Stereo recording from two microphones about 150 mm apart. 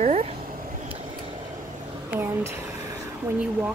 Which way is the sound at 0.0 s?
50° right (ahead or behind).